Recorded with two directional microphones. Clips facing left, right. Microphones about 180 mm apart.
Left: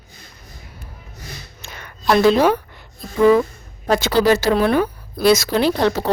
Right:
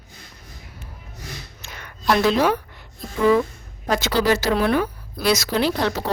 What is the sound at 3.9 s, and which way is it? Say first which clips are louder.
Speech: left 4 dB; 30° left (ahead or behind).